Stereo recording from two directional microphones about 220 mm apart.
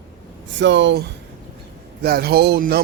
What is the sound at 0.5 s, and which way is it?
Speech, 55° right (ahead or behind).